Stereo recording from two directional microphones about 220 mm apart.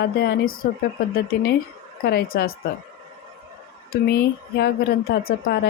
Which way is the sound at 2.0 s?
45° left (ahead or behind).